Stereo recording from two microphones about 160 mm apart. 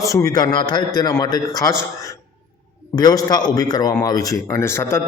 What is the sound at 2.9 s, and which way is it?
A man's voice, 25° left (ahead or behind).